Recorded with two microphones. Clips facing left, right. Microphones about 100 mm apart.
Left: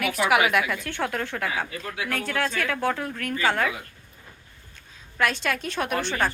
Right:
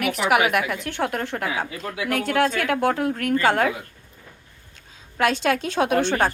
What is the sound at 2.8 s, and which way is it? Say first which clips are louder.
Speech: right 5 dB; 55° right (ahead or behind).